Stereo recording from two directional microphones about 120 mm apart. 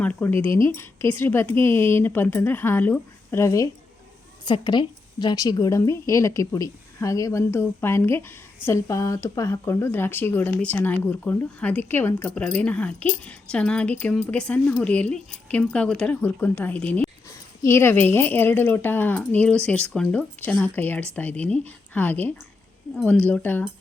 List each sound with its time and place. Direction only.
0.0 s a woman's voice: 15° left (ahead or behind)
4.4 s a woman's voice: 40° left (ahead or behind); by 23.6 s 15° left (ahead or behind)